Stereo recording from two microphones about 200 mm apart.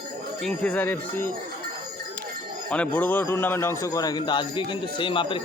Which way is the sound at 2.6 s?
5° left (ahead or behind).